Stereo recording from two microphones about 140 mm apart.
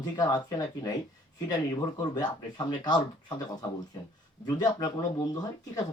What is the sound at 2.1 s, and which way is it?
Speech, 30° left (ahead or behind).